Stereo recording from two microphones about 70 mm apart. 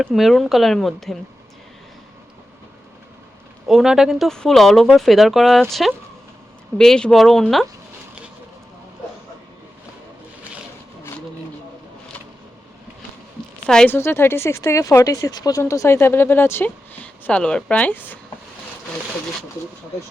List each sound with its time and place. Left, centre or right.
0.1 s speech: centre
3.7 s speech: centre
4.3 s speech: centre
6.7 s speech: centre
13.8 s speech: left
16.0 s speech: left
16.6 s a woman's voice: left